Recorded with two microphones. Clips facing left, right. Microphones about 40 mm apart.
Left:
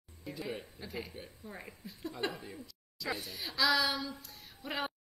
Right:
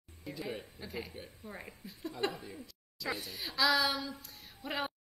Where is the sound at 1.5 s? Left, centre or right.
Right.